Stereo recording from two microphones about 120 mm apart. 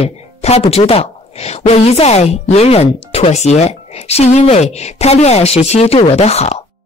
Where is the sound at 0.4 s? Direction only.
60° left (ahead or behind).